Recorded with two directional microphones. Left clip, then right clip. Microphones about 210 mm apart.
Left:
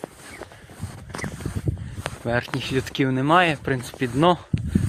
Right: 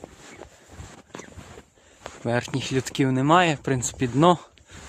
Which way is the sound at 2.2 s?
20° right (ahead or behind).